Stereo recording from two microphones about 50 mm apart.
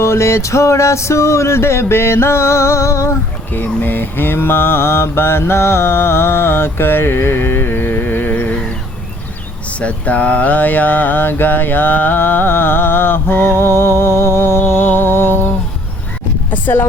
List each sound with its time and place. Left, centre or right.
0.0 s music: left
3.5 s mantra: left
9.8 s mantra: left
16.5 s a sound: left